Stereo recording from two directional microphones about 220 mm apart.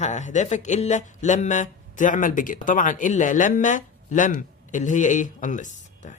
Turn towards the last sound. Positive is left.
turn(degrees=35)  # may be behind; listen again after turning